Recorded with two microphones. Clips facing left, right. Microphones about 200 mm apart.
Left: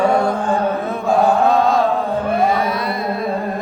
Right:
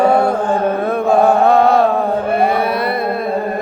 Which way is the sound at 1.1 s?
60° right (ahead or behind).